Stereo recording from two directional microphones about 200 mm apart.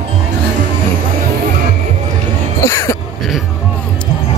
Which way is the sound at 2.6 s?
15° left (ahead or behind).